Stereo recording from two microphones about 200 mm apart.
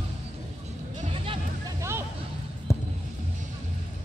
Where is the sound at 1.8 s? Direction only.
15° right (ahead or behind).